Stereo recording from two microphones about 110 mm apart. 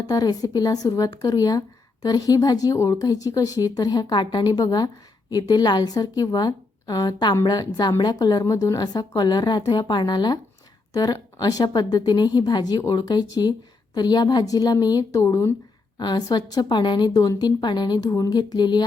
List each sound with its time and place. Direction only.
0.1 s speech: 35° left (ahead or behind)
16.0 s speech: 40° left (ahead or behind)